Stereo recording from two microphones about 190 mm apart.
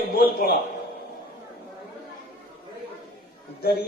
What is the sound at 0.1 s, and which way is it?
Speech, 55° left (ahead or behind).